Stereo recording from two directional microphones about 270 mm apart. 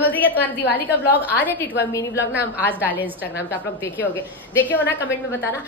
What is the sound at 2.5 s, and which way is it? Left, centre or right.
Speech, centre.